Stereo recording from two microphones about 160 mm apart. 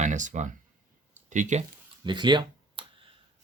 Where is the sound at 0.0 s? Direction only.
50° right (ahead or behind).